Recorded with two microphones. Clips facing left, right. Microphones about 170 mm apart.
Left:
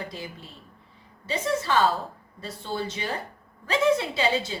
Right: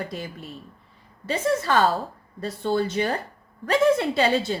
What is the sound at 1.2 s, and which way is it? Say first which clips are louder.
Speech: right 3 dB; 50° right (ahead or behind).